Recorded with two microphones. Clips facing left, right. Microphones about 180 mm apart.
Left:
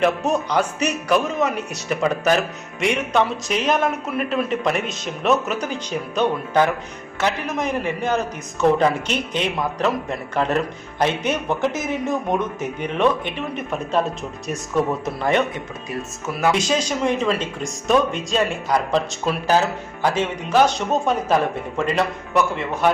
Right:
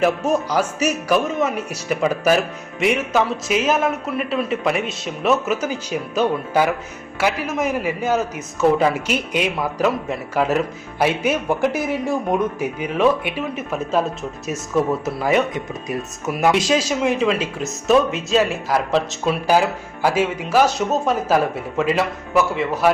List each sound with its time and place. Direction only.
0.0 s speech: 5° right (ahead or behind)
15.9 s speech: 20° right (ahead or behind)
16.5 s speech: 5° right (ahead or behind)